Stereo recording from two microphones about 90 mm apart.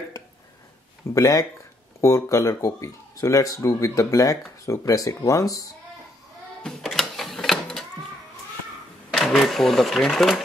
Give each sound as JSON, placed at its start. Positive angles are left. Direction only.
{"t": 1.1, "sound": "speech", "side_deg": 40}
{"t": 6.6, "sound": "mechanisms", "side_deg": 5}
{"t": 9.1, "sound": "speech", "side_deg": 0}